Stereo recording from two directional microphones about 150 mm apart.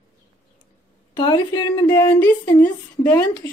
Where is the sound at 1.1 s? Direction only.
30° left (ahead or behind).